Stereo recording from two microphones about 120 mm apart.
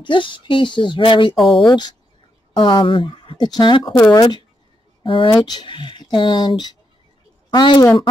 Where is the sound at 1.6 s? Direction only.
35° left (ahead or behind).